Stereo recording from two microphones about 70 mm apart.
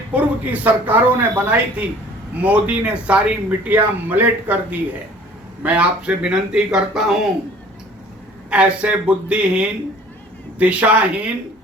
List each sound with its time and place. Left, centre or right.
0.1 s speech: right; by 7.3 s centre
8.4 s speech: centre